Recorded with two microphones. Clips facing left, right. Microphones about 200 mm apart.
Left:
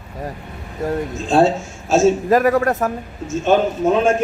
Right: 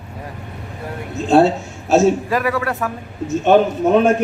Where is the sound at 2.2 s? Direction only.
45° left (ahead or behind).